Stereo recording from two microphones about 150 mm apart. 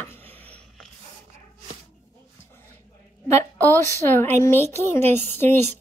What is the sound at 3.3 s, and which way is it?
A woman's voice, 15° left (ahead or behind).